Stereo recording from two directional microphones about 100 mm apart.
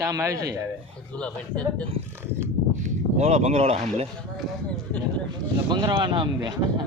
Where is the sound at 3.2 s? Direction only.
90° right.